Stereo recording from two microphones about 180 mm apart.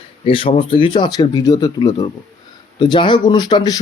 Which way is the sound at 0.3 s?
30° left (ahead or behind).